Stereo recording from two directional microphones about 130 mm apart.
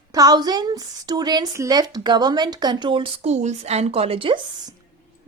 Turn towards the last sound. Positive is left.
turn(degrees=-45)  # may be behind; listen again after turning